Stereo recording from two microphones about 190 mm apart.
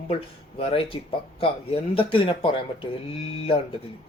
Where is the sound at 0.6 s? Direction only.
30° left (ahead or behind).